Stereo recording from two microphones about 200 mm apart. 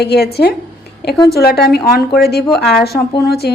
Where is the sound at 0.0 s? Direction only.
55° left (ahead or behind).